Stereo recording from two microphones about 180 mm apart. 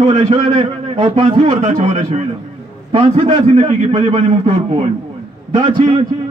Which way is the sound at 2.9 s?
30° right (ahead or behind).